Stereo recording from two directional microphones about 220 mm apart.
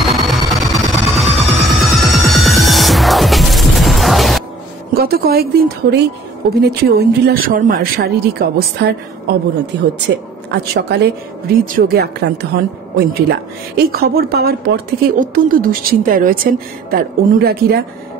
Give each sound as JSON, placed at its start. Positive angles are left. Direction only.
{"t": 0.0, "sound": "music", "side_deg": 0}
{"t": 4.9, "sound": "speech", "side_deg": -45}